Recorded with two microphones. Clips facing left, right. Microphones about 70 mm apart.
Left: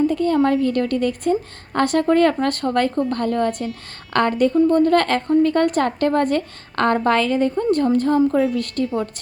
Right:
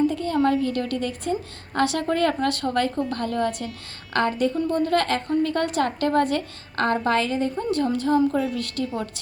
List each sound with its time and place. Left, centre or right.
0.1 s a sound: left
0.4 s a woman's voice: left
4.7 s a woman's voice: left